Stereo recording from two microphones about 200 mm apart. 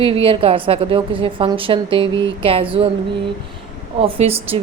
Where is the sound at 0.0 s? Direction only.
25° right (ahead or behind).